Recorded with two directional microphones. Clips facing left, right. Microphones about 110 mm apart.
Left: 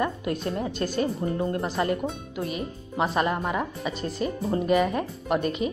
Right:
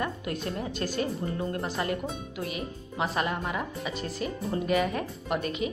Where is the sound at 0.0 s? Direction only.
30° left (ahead or behind).